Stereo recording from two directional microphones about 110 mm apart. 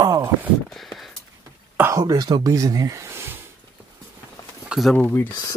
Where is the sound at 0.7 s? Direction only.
Centre (ahead or behind).